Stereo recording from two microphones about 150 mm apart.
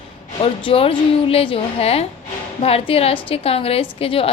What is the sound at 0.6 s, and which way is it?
A woman's voice, 40° left (ahead or behind).